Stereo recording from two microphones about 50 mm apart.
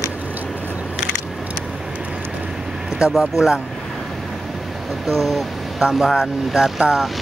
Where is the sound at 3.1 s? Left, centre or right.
Centre.